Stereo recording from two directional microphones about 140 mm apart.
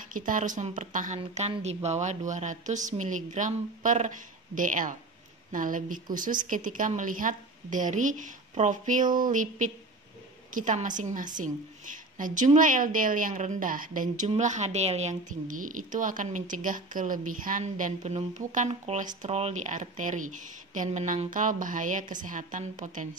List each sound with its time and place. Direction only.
0.1 s a woman's voice: 70° right (ahead or behind)
14.3 s a woman's voice: 55° right (ahead or behind)